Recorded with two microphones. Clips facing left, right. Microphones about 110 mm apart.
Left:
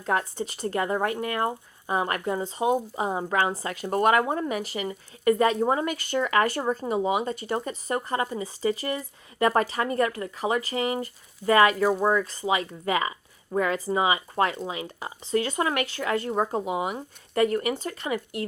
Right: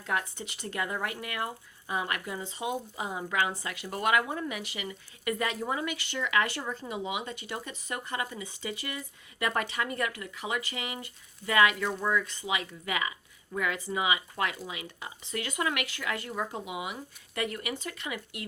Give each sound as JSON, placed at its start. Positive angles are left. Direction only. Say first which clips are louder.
{"t": 0.0, "sound": "speech", "louder": "left 6 dB", "side_deg": 40}